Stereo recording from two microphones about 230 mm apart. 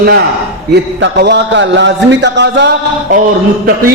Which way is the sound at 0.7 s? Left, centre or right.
Right.